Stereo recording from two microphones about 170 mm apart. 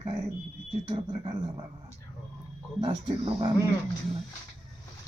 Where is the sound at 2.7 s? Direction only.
30° right (ahead or behind).